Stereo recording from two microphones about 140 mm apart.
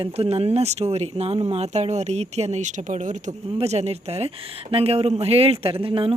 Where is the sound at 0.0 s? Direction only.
45° right (ahead or behind).